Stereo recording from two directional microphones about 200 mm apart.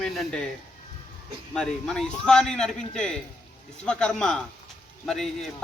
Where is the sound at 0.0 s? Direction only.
Centre (ahead or behind).